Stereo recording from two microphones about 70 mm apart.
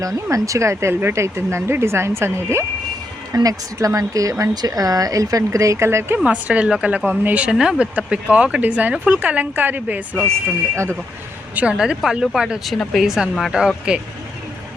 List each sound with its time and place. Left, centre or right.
0.0 s speech: right
3.3 s speech: right
6.2 s a woman's voice: centre
11.5 s speech: centre